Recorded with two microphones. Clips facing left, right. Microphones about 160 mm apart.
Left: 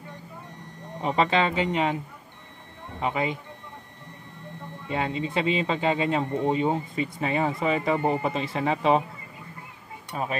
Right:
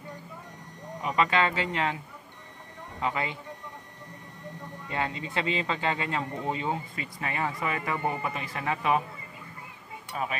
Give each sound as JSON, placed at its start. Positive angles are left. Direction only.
{"t": 1.0, "sound": "speech", "side_deg": 30}
{"t": 3.0, "sound": "speech", "side_deg": 20}
{"t": 4.8, "sound": "speech", "side_deg": 20}